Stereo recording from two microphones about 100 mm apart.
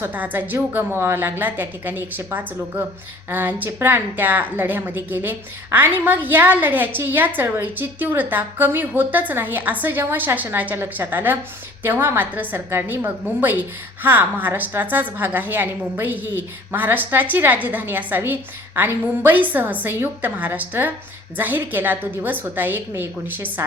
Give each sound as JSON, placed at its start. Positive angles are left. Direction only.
{"t": 0.0, "sound": "a woman's voice", "side_deg": -20}